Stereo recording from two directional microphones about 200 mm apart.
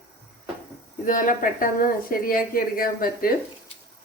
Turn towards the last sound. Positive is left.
turn(degrees=45)  # may be behind; listen again after turning